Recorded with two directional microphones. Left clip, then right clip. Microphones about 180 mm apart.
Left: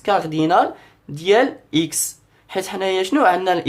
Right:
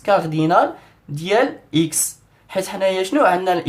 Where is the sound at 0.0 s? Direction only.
30° left (ahead or behind).